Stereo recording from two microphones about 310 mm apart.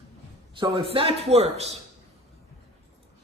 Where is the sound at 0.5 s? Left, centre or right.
Centre.